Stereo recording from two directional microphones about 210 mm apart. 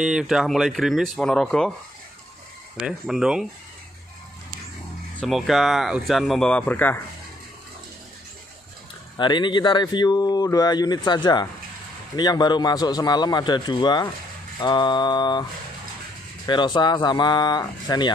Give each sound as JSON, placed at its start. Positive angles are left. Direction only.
{"t": 0.0, "sound": "speech", "side_deg": -5}
{"t": 2.8, "sound": "speech", "side_deg": -5}
{"t": 5.2, "sound": "speech", "side_deg": 0}
{"t": 9.1, "sound": "speech", "side_deg": 20}
{"t": 16.4, "sound": "speech", "side_deg": 20}